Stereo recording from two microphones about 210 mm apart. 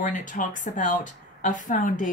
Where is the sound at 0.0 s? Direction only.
40° left (ahead or behind).